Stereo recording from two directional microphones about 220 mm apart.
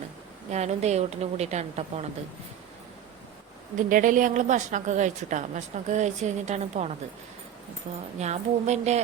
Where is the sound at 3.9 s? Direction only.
35° right (ahead or behind).